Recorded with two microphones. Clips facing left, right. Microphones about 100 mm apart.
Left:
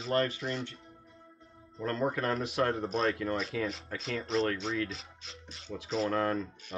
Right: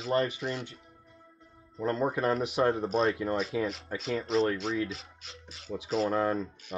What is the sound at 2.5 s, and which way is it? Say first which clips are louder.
Speech: right 3 dB; centre (ahead or behind).